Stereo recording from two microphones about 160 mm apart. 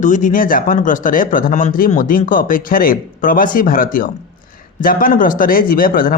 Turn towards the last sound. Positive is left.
turn(degrees=60)  # may be behind; listen again after turning